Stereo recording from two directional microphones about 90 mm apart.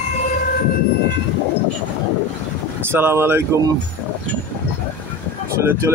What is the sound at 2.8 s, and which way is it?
Speech, 25° right (ahead or behind).